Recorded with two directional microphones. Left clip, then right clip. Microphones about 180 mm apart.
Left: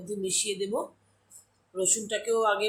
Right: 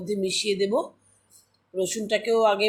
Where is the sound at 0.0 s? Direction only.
25° right (ahead or behind).